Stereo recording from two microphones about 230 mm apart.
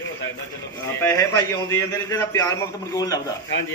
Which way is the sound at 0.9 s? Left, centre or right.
Centre.